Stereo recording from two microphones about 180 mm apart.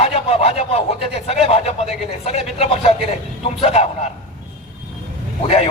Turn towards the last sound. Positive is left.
turn(degrees=35)  # may be behind; listen again after turning